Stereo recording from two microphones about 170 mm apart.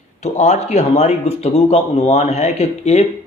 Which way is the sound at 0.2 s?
40° left (ahead or behind).